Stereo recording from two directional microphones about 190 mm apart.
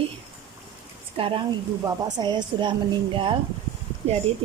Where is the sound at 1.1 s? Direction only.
30° right (ahead or behind).